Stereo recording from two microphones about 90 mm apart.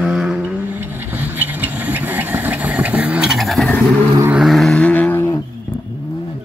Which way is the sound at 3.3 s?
Centre (ahead or behind).